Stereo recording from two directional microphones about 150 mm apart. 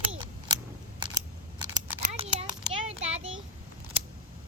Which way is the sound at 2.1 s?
45° right (ahead or behind).